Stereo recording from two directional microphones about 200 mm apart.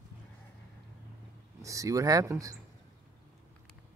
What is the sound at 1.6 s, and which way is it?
Speech, 15° right (ahead or behind).